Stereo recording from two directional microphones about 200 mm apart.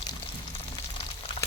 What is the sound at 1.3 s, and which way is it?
Boiling, 25° left (ahead or behind).